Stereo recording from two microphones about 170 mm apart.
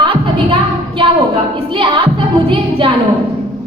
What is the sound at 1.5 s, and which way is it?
A woman's voice, 30° right (ahead or behind).